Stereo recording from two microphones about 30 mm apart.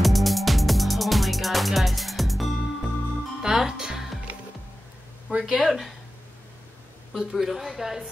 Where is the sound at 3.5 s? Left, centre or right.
Centre.